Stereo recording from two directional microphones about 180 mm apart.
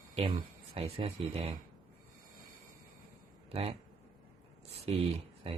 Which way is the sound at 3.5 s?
35° right (ahead or behind).